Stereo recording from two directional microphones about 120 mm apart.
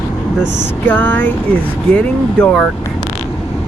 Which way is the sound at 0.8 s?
15° left (ahead or behind).